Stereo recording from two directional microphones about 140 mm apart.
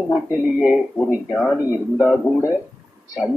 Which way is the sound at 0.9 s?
5° left (ahead or behind).